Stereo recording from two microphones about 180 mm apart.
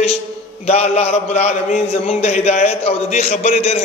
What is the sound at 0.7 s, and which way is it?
A man's voice, 35° left (ahead or behind).